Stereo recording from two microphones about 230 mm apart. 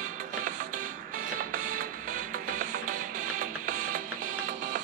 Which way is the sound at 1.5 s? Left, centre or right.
Right.